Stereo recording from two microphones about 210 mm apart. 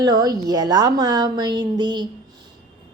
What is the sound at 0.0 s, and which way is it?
A woman's voice, 20° right (ahead or behind).